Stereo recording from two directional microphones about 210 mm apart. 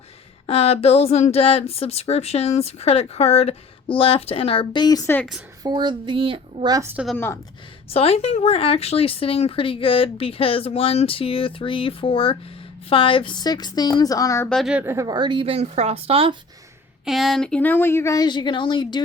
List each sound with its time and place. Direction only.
0.4 s speech: 30° left (ahead or behind); by 5.4 s 5° left (ahead or behind)
5.6 s a woman's voice: 20° right (ahead or behind)
6.9 s a woman's voice: centre (ahead or behind)
7.9 s speech: 30° left (ahead or behind)
14.5 s a woman's voice: 5° right (ahead or behind); by 16.4 s 25° right (ahead or behind)
17.1 s speech: centre (ahead or behind); by 19.0 s 20° left (ahead or behind)